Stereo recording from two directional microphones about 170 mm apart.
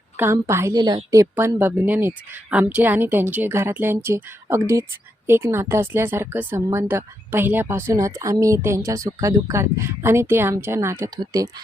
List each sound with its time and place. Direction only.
0.2 s a woman's voice: 15° right (ahead or behind)